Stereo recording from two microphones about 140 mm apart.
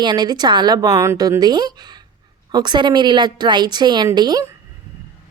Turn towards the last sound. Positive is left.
turn(degrees=-30)  # may be behind; listen again after turning